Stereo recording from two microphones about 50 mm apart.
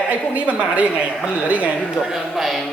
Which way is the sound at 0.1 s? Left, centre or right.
Right.